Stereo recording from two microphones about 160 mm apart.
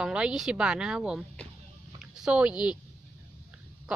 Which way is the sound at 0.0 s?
5° right (ahead or behind).